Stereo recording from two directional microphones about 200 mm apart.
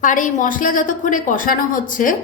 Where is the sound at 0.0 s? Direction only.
40° left (ahead or behind).